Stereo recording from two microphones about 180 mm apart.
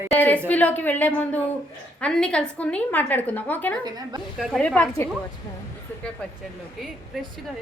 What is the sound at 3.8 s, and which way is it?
Speech, 20° right (ahead or behind).